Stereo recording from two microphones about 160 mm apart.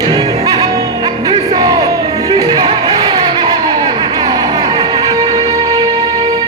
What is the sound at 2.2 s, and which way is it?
Music, 25° right (ahead or behind).